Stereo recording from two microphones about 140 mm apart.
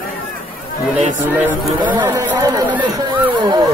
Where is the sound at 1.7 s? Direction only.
35° right (ahead or behind).